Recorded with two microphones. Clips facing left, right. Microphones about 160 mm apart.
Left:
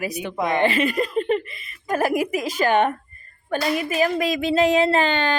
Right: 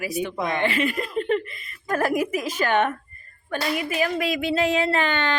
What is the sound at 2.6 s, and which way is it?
Speech, 35° left (ahead or behind).